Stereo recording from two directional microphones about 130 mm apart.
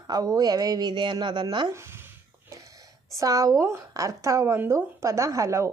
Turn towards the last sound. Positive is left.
turn(degrees=-25)  # may be behind; listen again after turning